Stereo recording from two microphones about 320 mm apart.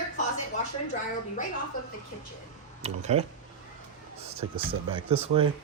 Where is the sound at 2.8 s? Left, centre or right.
Centre.